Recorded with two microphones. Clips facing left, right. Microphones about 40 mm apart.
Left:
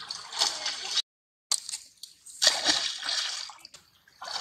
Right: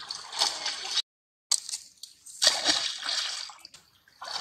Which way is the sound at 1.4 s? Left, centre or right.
Left.